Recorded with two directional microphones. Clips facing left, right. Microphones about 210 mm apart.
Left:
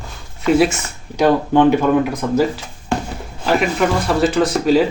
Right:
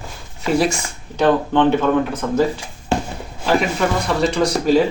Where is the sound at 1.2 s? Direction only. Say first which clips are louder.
Left 2 dB; 10° left (ahead or behind).